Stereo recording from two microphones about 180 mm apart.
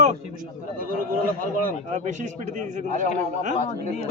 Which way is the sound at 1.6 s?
40° right (ahead or behind).